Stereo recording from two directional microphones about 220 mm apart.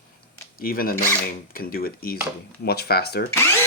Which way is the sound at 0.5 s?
40° left (ahead or behind).